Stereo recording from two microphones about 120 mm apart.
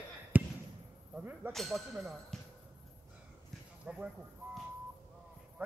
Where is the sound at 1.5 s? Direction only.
Centre (ahead or behind).